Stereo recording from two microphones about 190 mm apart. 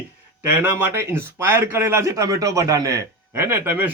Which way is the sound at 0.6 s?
10° right (ahead or behind).